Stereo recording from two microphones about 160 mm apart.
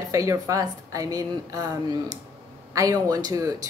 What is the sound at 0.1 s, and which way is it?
Speech, 20° right (ahead or behind).